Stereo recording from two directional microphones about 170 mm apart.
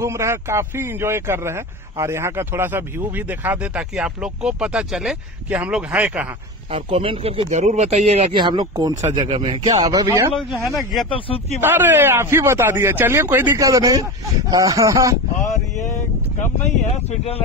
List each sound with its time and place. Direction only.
0.0 s a man's voice: 15° right (ahead or behind)
6.7 s speech: 30° right (ahead or behind)
8.4 s speech: 25° right (ahead or behind)
10.3 s speech: centre (ahead or behind)
11.1 s speech: 30° left (ahead or behind)
11.6 s a man's voice: 10° right (ahead or behind)
15.5 s speech: 45° left (ahead or behind)